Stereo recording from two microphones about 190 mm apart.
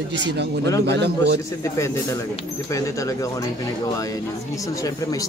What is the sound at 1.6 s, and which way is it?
Speech, 15° left (ahead or behind).